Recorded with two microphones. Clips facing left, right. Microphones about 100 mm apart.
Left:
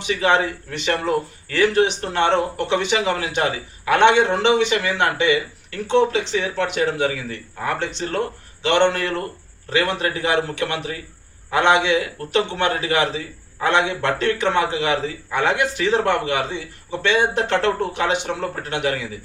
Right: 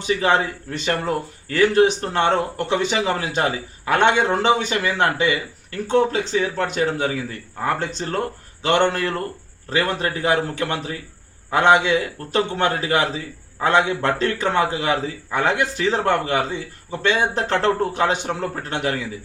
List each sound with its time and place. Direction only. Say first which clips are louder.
0.0 s a man's voice: even; 35° right (ahead or behind)